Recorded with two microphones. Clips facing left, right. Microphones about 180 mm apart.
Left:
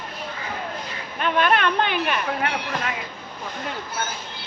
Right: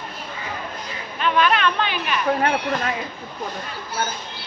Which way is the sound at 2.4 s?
40° right (ahead or behind).